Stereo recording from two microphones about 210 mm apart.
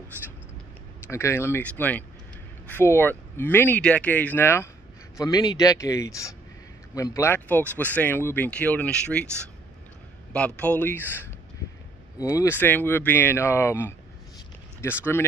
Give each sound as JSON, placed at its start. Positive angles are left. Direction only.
{"t": 1.0, "sound": "speech", "side_deg": 10}